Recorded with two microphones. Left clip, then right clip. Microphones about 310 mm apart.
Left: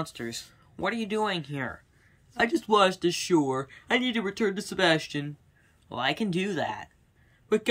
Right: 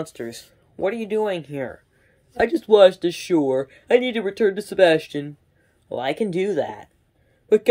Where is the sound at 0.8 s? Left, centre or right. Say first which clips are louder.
Right 6 dB; centre.